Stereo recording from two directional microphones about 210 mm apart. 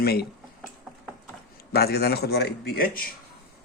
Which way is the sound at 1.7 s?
50° left (ahead or behind).